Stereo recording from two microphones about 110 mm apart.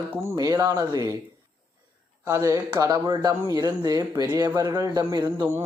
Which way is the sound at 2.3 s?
30° right (ahead or behind).